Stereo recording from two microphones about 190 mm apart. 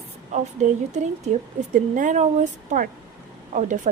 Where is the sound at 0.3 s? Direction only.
40° right (ahead or behind).